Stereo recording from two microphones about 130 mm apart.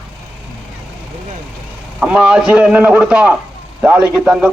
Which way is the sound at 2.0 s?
5° right (ahead or behind).